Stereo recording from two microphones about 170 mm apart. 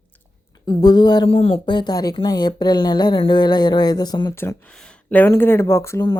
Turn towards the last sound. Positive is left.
turn(degrees=20)  # may be behind; listen again after turning